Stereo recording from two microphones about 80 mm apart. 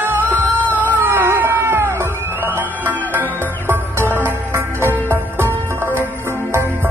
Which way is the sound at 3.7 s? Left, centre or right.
Right.